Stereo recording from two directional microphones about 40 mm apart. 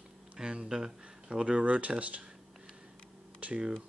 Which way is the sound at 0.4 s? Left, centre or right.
Right.